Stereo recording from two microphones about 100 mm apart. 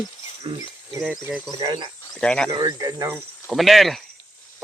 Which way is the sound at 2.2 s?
10° left (ahead or behind).